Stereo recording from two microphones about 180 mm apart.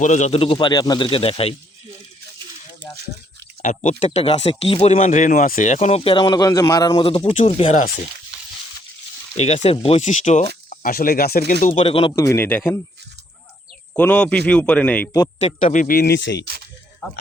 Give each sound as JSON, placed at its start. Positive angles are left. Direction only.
{"t": 0.0, "sound": "speech", "side_deg": 40}
{"t": 3.8, "sound": "speech", "side_deg": 40}
{"t": 9.4, "sound": "speech", "side_deg": 35}
{"t": 10.7, "sound": "speech", "side_deg": 50}
{"t": 11.8, "sound": "speech", "side_deg": 30}
{"t": 12.1, "sound": "a man's voice", "side_deg": 15}
{"t": 13.9, "sound": "a man's voice", "side_deg": 10}
{"t": 15.4, "sound": "speech", "side_deg": 45}